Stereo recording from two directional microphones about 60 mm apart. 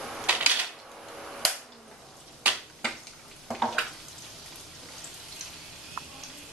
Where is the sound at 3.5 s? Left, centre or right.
Centre.